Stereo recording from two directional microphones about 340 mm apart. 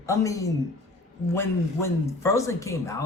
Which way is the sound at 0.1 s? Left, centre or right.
Centre.